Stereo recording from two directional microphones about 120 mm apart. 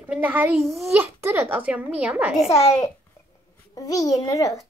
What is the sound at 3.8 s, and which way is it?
Speech, 30° left (ahead or behind).